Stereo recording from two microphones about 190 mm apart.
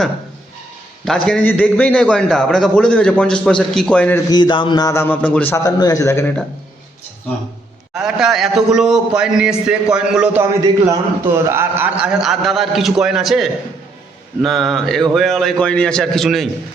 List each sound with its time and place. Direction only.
1.0 s a man's voice: centre (ahead or behind)
4.3 s a man's voice: 25° left (ahead or behind)
7.9 s a man's voice: 5° right (ahead or behind)